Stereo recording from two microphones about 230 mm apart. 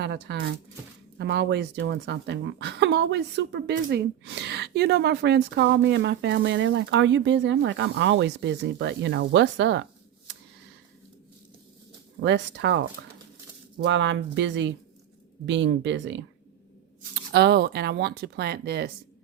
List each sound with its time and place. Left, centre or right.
0.0 s a woman's voice: right
12.2 s a woman's voice: right
17.3 s a woman's voice: right